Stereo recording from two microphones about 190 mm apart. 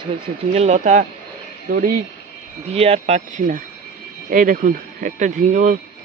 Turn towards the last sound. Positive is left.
turn(degrees=-40)  # may be behind; listen again after turning